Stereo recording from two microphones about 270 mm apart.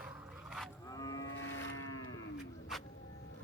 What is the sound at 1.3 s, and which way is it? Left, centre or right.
Boat, left.